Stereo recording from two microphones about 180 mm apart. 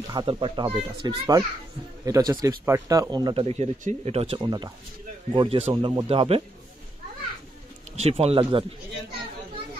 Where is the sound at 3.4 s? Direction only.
35° right (ahead or behind).